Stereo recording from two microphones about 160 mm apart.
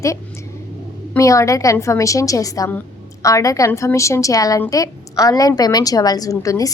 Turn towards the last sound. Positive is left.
turn(degrees=20)  # may be behind; listen again after turning